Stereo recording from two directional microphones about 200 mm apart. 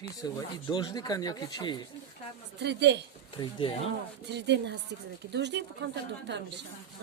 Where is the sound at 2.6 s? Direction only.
60° right (ahead or behind).